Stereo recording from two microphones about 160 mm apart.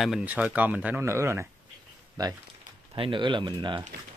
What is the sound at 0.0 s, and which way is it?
Speech, 5° right (ahead or behind).